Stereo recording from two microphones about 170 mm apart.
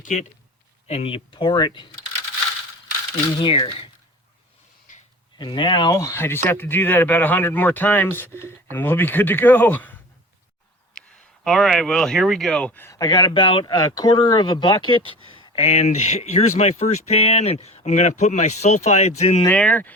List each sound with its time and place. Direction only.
0.0 s a man's voice: 45° left (ahead or behind); by 1.9 s 25° left (ahead or behind)
3.3 s speech: 30° left (ahead or behind)
5.4 s speech: 25° left (ahead or behind); by 10.0 s 10° left (ahead or behind)
11.0 s a sound: 5° left (ahead or behind)
11.4 s speech: centre (ahead or behind); by 19.4 s 40° left (ahead or behind)
19.5 s speech: 10° left (ahead or behind)